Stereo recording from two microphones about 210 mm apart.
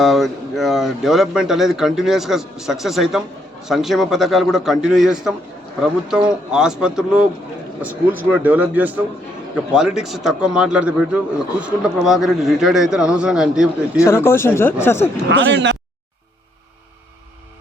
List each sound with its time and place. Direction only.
0.0 s speech: centre (ahead or behind)
14.0 s speech: 10° left (ahead or behind)
15.3 s speech: 55° right (ahead or behind)